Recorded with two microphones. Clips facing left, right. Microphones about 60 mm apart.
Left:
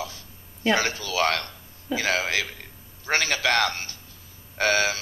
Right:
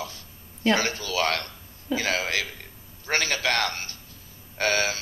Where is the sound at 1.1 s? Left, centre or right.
Left.